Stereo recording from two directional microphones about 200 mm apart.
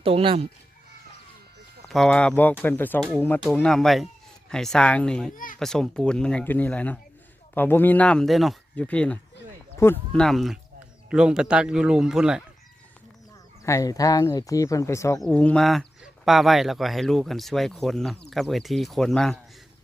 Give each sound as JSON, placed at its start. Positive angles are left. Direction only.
{"t": 0.0, "sound": "speech", "side_deg": -25}
{"t": 1.9, "sound": "speech", "side_deg": 5}
{"t": 5.3, "sound": "a child's voice", "side_deg": 40}
{"t": 5.5, "sound": "speech", "side_deg": 0}
{"t": 13.7, "sound": "speech", "side_deg": 15}